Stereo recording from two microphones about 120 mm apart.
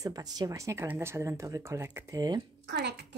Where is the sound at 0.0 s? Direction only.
30° right (ahead or behind).